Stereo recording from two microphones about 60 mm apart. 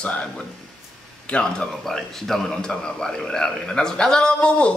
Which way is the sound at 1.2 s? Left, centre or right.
Centre.